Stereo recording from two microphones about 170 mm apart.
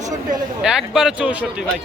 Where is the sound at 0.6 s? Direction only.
5° right (ahead or behind).